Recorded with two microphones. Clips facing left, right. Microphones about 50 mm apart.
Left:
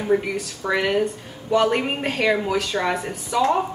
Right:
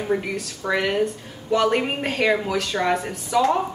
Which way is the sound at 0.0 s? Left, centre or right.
Centre.